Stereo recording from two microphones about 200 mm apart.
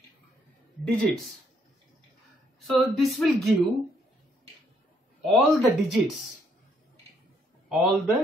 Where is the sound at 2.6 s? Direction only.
Centre (ahead or behind).